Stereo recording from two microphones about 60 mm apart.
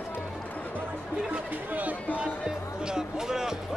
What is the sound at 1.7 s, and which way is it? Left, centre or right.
Speech, right.